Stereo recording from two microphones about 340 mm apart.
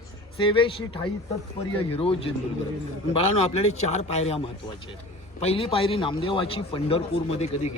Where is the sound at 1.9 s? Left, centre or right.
Centre.